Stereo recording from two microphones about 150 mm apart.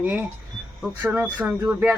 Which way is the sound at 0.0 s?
10° right (ahead or behind).